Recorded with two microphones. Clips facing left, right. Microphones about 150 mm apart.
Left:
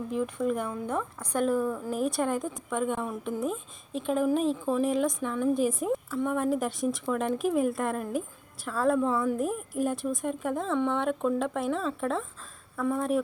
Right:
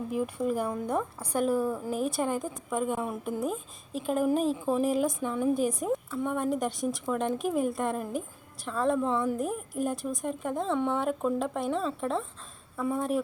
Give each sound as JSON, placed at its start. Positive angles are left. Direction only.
{"t": 0.1, "sound": "a woman's voice", "side_deg": -10}
{"t": 0.6, "sound": "a woman's voice", "side_deg": -35}
{"t": 1.3, "sound": "a woman's voice", "side_deg": -5}